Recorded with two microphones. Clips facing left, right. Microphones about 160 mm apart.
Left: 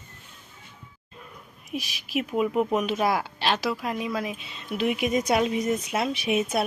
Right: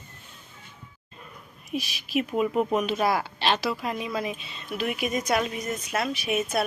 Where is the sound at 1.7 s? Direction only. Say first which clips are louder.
Right 2 dB; 10° left (ahead or behind).